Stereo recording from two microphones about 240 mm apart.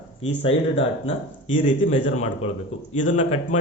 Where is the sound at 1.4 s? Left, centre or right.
Left.